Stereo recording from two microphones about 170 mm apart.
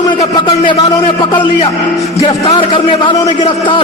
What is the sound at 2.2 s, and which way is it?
A man's voice, 35° left (ahead or behind).